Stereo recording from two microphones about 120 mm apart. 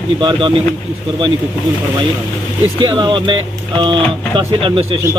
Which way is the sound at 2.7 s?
40° right (ahead or behind).